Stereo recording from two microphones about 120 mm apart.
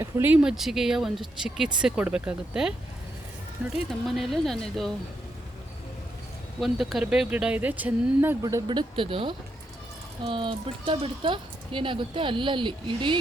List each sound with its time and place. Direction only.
0.0 s speech: 20° right (ahead or behind)
0.4 s speech: 5° right (ahead or behind)
3.8 s speech: centre (ahead or behind)
6.6 s speech: centre (ahead or behind); by 8.6 s 20° right (ahead or behind)
8.6 s speech: 40° right (ahead or behind)